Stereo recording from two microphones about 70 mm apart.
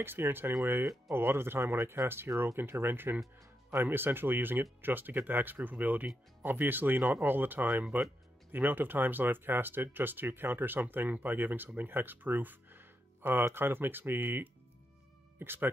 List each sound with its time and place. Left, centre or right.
0.0 s speech: right